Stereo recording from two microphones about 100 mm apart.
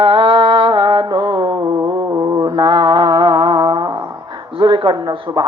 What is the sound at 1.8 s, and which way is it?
Mantra, 35° right (ahead or behind).